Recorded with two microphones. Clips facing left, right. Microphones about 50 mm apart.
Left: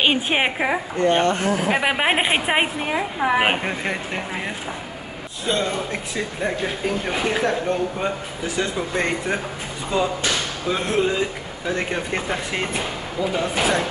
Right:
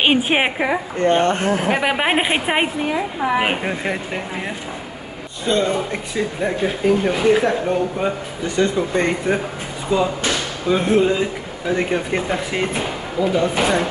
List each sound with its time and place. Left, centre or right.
0.0 s a woman's voice: centre
1.2 s speech: right
1.7 s speech: centre
2.9 s a woman's voice: centre
3.6 s speech: centre
5.4 s a woman's voice: centre
7.3 s speech: centre